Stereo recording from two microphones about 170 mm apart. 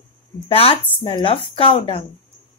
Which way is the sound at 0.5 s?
35° left (ahead or behind).